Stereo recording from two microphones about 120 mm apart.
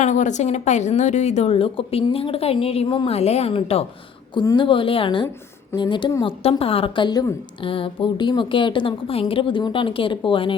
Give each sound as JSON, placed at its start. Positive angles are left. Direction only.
{"t": 0.0, "sound": "a woman's voice", "side_deg": 80}
{"t": 4.5, "sound": "a woman's voice", "side_deg": 45}
{"t": 6.2, "sound": "a woman's voice", "side_deg": 50}
{"t": 7.6, "sound": "a woman's voice", "side_deg": 45}